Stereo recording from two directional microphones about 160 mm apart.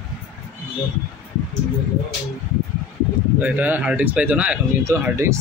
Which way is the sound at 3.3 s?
10° right (ahead or behind).